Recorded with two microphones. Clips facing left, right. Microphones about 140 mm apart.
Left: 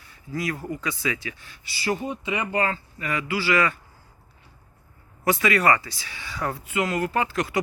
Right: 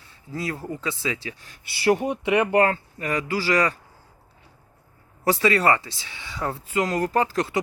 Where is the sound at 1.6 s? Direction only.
65° right (ahead or behind); by 3.8 s 40° right (ahead or behind).